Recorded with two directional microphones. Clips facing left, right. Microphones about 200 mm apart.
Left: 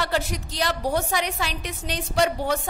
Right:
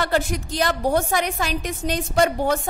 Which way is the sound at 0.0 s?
50° right (ahead or behind).